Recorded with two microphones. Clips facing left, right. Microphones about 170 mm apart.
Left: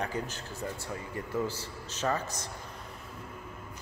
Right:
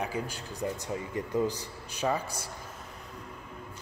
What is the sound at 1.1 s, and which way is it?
Speech, 15° right (ahead or behind).